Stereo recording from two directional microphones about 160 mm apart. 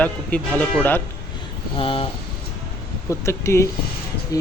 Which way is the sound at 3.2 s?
15° left (ahead or behind).